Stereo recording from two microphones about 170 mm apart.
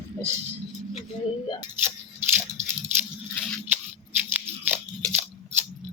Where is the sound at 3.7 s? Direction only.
10° right (ahead or behind).